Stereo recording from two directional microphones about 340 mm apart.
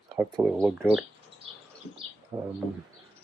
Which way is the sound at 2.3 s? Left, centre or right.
Centre.